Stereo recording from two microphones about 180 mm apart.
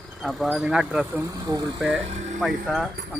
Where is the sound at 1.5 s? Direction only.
20° right (ahead or behind).